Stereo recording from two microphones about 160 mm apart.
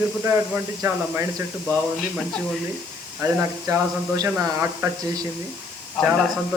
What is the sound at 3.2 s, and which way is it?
Speech, 20° right (ahead or behind).